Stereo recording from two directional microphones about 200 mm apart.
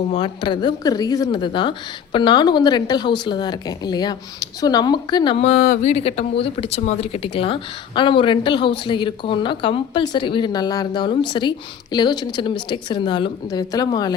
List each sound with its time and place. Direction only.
0.1 s speech: 25° left (ahead or behind)